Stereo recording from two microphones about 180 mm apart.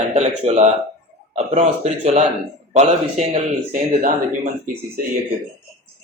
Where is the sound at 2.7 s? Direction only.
40° right (ahead or behind).